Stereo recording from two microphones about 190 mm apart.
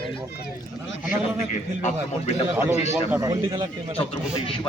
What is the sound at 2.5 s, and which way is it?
A man's voice, 10° right (ahead or behind).